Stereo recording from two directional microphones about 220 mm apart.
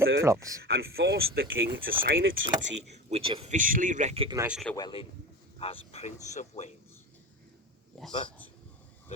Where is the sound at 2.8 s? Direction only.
25° right (ahead or behind).